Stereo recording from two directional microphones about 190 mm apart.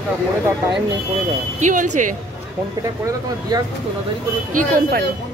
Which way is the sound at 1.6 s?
40° right (ahead or behind).